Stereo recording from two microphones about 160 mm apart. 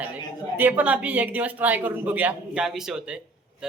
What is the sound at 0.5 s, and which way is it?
A man's voice, 10° right (ahead or behind).